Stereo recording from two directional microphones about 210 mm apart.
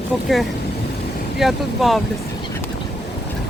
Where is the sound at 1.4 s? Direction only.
Centre (ahead or behind).